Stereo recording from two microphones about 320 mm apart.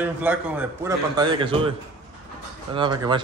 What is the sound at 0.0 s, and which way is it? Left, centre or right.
A man's voice, centre.